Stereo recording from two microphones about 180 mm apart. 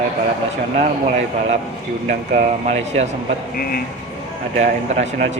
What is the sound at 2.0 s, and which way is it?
Speech, 45° right (ahead or behind).